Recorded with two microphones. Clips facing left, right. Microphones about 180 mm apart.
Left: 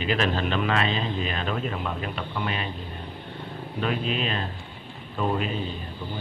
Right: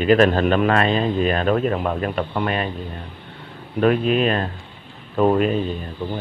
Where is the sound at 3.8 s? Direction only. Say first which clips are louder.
Right 10 dB; 50° right (ahead or behind).